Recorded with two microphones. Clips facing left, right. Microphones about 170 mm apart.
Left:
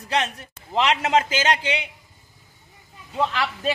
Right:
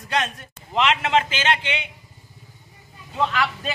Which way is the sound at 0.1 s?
30° left (ahead or behind).